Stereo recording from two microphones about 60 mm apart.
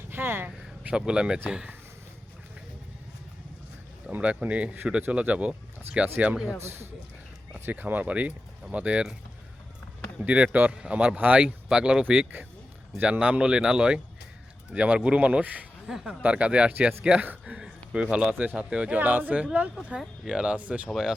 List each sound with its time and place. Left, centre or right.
0.1 s speech: right
0.9 s speech: centre
4.2 s speech: right
6.3 s speech: centre
7.5 s speech: right
10.2 s speech: right
15.9 s speech: centre
16.2 s speech: centre
19.9 s speech: centre